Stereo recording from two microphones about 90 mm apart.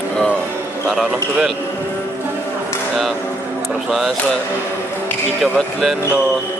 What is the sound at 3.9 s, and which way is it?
Speech, centre (ahead or behind).